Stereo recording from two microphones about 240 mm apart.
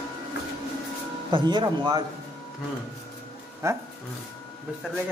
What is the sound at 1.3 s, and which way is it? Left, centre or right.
Speech, centre.